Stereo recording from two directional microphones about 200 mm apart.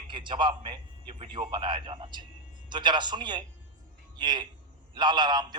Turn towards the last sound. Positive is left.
turn(degrees=-20)  # may be behind; listen again after turning